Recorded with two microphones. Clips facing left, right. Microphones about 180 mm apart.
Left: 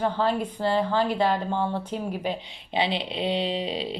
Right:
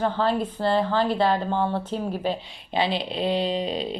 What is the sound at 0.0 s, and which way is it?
A woman's voice, 15° left (ahead or behind).